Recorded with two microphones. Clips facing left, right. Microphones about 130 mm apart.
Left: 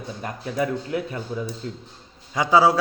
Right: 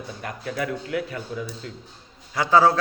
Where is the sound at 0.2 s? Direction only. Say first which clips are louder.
Left 3 dB; 25° left (ahead or behind).